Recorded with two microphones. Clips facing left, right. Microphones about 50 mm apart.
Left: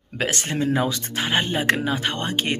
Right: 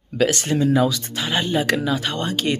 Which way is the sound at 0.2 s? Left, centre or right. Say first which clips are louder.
Right 5 dB; left.